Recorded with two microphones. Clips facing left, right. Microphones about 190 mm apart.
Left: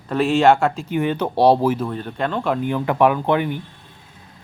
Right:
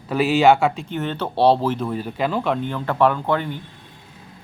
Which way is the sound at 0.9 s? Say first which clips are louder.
Left 4 dB; 10° left (ahead or behind).